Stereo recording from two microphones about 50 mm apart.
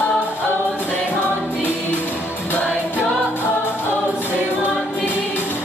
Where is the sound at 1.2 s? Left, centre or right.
Left.